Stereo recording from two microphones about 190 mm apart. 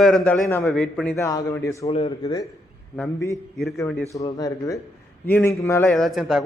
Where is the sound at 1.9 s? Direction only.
30° left (ahead or behind).